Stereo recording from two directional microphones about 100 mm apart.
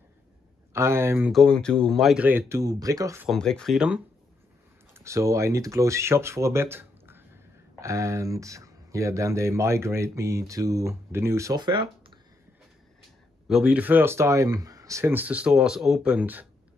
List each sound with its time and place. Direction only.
0.7 s speech: 25° right (ahead or behind)
1.3 s speech: 5° left (ahead or behind)
2.1 s speech: 20° right (ahead or behind); by 3.2 s 35° right (ahead or behind)
3.3 s speech: 5° left (ahead or behind)
4.9 s speech: 30° right (ahead or behind)
11.5 s speech: 50° right (ahead or behind)
13.5 s speech: 10° right (ahead or behind)